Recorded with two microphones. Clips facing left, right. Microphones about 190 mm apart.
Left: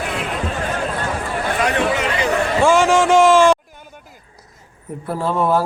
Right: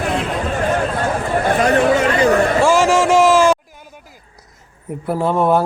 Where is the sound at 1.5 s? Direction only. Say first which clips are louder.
Right 5 dB; 45° right (ahead or behind).